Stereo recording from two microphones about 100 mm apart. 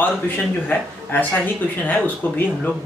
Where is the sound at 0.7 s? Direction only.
15° left (ahead or behind).